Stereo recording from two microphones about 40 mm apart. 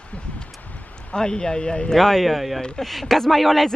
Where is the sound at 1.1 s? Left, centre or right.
Centre.